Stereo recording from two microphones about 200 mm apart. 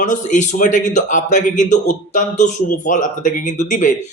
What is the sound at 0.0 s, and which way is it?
A man's voice, 40° left (ahead or behind).